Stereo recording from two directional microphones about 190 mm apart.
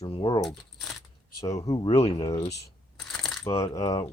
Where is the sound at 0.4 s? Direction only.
Centre (ahead or behind).